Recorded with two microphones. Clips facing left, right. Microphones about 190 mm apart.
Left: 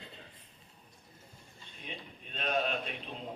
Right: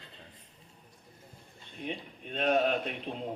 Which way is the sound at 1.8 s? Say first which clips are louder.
Right 8 dB; 55° right (ahead or behind).